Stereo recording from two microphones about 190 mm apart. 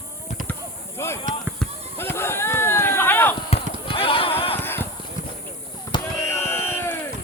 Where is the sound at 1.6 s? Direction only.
10° left (ahead or behind).